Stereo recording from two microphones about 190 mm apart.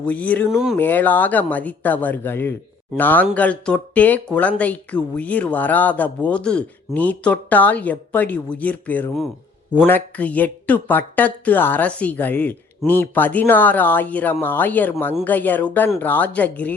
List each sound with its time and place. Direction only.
0.0 s speech: 5° left (ahead or behind)